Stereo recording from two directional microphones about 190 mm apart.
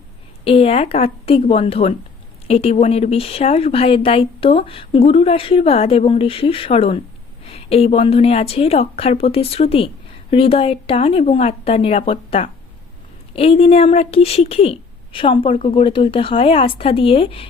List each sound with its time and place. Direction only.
0.4 s a woman's voice: 30° left (ahead or behind)